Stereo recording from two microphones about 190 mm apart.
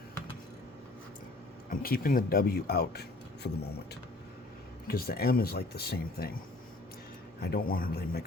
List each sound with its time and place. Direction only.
1.7 s speech: 50° left (ahead or behind)
4.9 s speech: 55° left (ahead or behind)
7.4 s speech: 55° left (ahead or behind)